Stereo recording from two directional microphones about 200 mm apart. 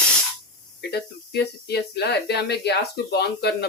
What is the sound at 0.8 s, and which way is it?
Speech, 55° left (ahead or behind).